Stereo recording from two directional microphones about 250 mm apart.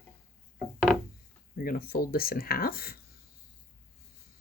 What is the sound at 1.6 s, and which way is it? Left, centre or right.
Speech, left.